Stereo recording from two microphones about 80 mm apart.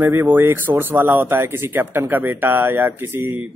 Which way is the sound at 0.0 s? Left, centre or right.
Right.